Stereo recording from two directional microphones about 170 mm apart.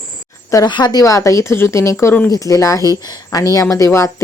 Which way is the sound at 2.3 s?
20° left (ahead or behind).